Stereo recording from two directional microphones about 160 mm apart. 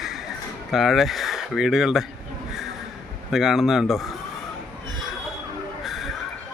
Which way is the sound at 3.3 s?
Centre (ahead or behind).